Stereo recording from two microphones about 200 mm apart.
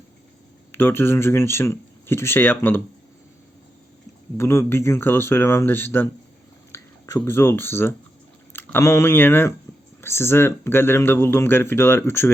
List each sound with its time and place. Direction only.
0.7 s speech: 10° left (ahead or behind)
4.4 s speech: 15° left (ahead or behind)